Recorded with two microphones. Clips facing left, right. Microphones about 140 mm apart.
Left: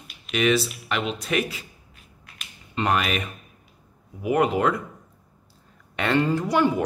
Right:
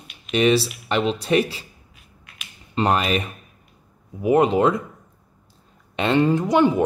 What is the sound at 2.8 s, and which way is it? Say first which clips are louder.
Speech: right 4 dB; 30° right (ahead or behind).